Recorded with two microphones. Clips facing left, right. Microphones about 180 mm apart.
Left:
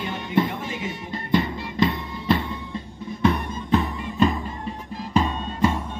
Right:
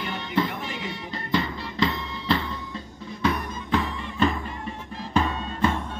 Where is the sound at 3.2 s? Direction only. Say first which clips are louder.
Left 4 dB; 20° left (ahead or behind).